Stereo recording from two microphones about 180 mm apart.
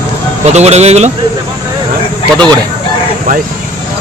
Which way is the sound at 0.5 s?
35° right (ahead or behind).